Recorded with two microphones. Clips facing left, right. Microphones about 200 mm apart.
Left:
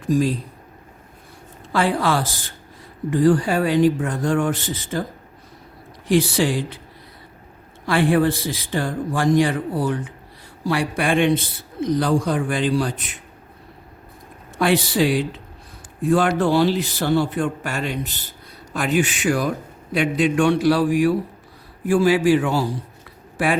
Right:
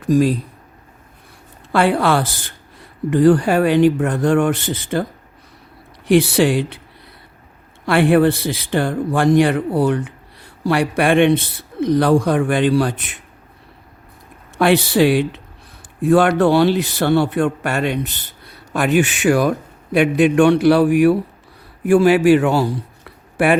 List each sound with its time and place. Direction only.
0.1 s a man's voice: 65° right (ahead or behind)
1.7 s a man's voice: 65° right (ahead or behind)
6.1 s a man's voice: 65° right (ahead or behind)
7.9 s a man's voice: 65° right (ahead or behind)
14.6 s a man's voice: 65° right (ahead or behind)
20.0 s a man's voice: 60° right (ahead or behind)